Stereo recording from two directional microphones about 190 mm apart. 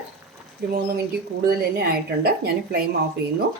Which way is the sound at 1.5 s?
55° right (ahead or behind).